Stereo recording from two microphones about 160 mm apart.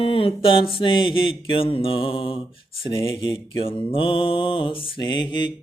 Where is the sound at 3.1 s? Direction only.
30° left (ahead or behind).